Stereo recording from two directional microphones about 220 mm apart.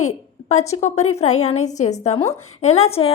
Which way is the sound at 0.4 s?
30° left (ahead or behind).